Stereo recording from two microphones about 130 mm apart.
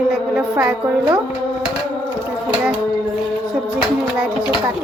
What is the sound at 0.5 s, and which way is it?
Speech, 20° right (ahead or behind).